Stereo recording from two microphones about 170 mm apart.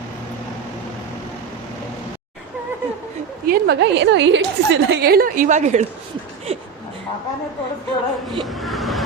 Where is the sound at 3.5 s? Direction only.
85° right; by 5.8 s 45° right (ahead or behind).